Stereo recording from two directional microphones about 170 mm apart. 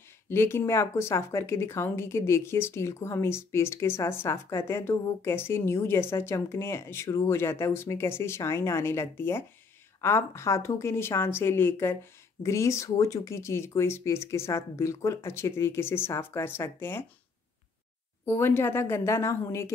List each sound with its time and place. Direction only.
0.3 s speech: 15° left (ahead or behind)
18.2 s speech: 15° left (ahead or behind)